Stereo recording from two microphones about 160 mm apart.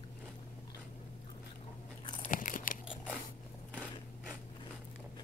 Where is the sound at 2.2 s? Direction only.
55° left (ahead or behind).